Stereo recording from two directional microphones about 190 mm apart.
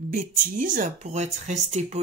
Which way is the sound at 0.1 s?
45° right (ahead or behind).